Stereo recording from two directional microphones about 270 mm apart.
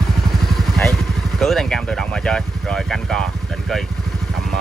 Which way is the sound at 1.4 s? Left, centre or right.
Centre.